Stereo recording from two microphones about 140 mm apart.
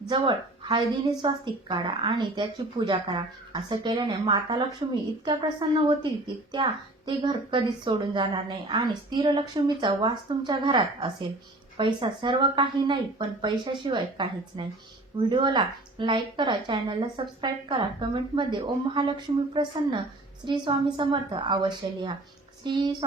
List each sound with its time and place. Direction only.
0.1 s speech: 35° right (ahead or behind)